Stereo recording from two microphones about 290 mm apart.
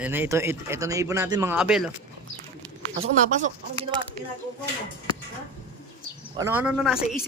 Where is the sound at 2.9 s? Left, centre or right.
Right.